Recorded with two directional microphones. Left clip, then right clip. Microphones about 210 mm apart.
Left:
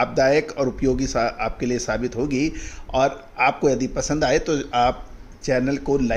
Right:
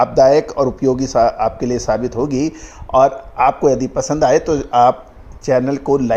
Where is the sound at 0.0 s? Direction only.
15° right (ahead or behind).